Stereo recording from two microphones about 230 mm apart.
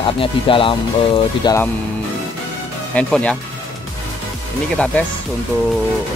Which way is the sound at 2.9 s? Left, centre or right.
Centre.